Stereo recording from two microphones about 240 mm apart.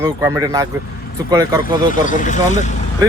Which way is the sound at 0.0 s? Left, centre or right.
Centre.